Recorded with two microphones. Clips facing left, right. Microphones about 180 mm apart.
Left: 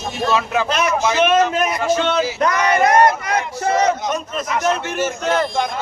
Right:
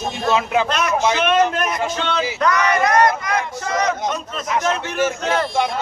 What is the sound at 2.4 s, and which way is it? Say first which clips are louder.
Speech: right 1 dB; 25° left (ahead or behind).